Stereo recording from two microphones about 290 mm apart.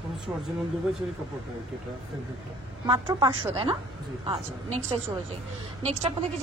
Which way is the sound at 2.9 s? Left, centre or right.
Centre.